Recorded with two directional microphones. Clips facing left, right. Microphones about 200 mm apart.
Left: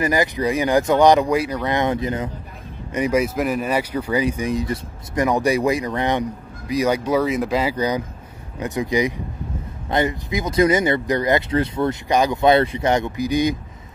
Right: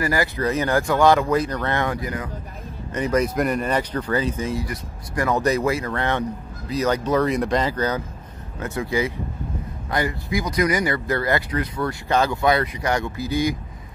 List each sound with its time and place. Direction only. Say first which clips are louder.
0.0 s speech: left 3 dB; 20° left (ahead or behind)
2.9 s speech: left 2 dB; 10° left (ahead or behind)